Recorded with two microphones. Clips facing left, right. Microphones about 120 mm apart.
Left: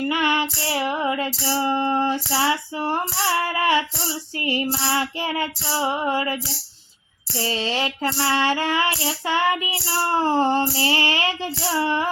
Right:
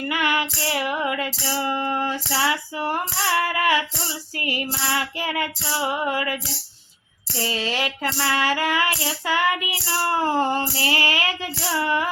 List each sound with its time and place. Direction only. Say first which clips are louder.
0.0 s female singing: left 2 dB; 25° left (ahead or behind)